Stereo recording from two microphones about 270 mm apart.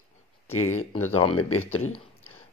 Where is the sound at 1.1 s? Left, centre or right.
Centre.